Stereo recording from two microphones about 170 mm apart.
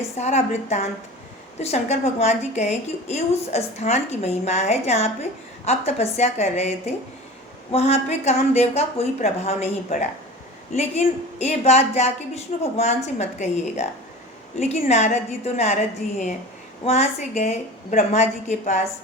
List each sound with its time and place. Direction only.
0.2 s a woman's voice: 40° left (ahead or behind)